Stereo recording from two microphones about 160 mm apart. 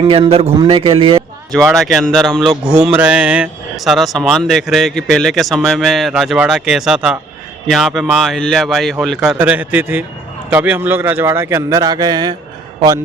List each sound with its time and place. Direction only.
0.0 s a man's voice: 35° right (ahead or behind)
1.5 s a man's voice: centre (ahead or behind); by 12.4 s 25° right (ahead or behind)